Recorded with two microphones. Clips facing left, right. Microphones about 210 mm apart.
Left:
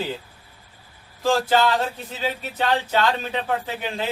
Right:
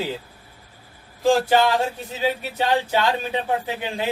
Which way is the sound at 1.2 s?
15° right (ahead or behind).